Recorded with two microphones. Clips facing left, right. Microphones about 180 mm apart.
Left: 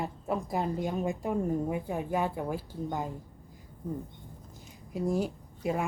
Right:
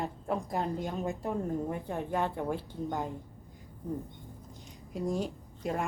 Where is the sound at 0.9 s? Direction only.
15° left (ahead or behind).